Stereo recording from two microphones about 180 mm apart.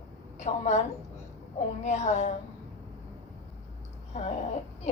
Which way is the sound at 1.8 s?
40° left (ahead or behind).